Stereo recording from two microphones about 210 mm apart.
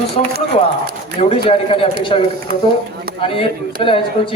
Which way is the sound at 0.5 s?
30° left (ahead or behind).